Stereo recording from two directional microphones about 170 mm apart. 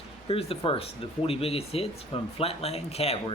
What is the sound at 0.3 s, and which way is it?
Speech, 35° left (ahead or behind).